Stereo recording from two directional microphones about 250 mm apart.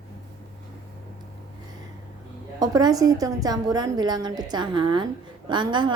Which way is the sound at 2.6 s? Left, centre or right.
Centre.